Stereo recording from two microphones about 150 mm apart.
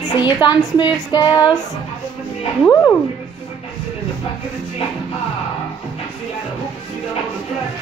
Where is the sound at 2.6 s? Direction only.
15° left (ahead or behind).